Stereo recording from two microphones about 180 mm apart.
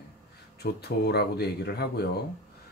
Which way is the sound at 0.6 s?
65° left (ahead or behind).